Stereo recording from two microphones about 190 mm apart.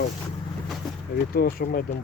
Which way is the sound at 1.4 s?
50° left (ahead or behind).